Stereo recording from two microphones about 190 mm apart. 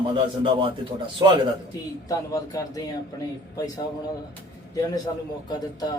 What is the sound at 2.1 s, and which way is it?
Speech, 15° left (ahead or behind).